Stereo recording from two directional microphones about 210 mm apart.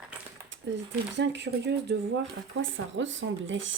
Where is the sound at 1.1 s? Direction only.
55° right (ahead or behind).